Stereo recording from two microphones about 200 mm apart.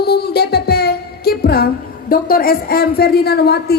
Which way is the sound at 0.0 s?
55° left (ahead or behind).